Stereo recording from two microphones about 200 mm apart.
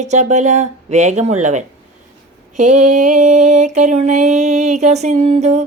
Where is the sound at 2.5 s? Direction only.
40° right (ahead or behind).